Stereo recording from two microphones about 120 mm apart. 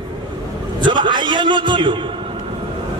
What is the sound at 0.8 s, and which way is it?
A man's voice, 40° right (ahead or behind).